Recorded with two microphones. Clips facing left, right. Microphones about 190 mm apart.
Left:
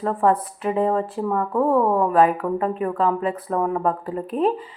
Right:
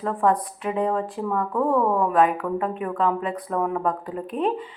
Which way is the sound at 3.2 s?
5° left (ahead or behind).